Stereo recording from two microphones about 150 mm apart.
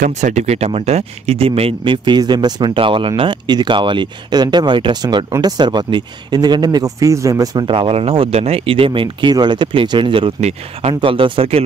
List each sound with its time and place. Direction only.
0.0 s speech: 50° right (ahead or behind)